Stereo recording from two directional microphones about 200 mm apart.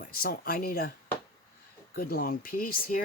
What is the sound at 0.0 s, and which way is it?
Speech, 45° left (ahead or behind).